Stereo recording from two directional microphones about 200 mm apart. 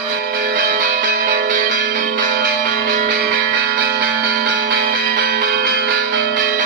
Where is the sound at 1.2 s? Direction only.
45° right (ahead or behind).